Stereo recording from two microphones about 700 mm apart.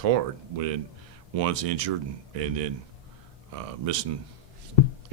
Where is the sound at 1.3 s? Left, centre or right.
Right.